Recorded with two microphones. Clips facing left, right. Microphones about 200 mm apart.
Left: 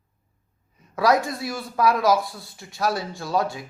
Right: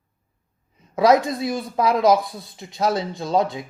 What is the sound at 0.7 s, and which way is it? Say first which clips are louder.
Speech: right 4 dB; 20° right (ahead or behind).